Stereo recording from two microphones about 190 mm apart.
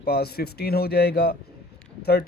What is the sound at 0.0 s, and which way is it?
Speech, 55° left (ahead or behind).